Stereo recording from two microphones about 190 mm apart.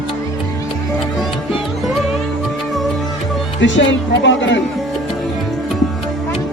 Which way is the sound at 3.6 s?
75° left (ahead or behind).